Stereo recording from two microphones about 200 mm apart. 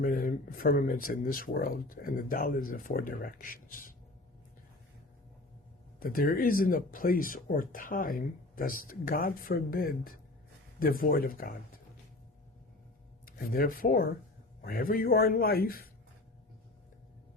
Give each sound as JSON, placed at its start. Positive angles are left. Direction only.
{"t": 0.0, "sound": "speech", "side_deg": 45}
{"t": 6.0, "sound": "speech", "side_deg": 45}
{"t": 13.2, "sound": "speech", "side_deg": 45}